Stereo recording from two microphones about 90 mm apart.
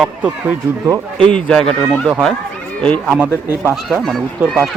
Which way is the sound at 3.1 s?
20° right (ahead or behind).